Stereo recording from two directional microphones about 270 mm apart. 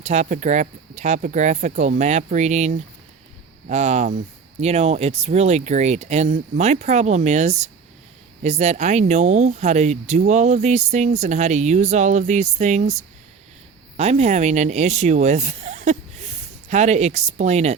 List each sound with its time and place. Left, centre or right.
0.0 s speech: right